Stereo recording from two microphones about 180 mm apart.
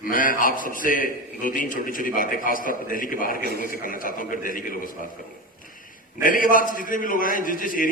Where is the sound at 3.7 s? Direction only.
50° left (ahead or behind).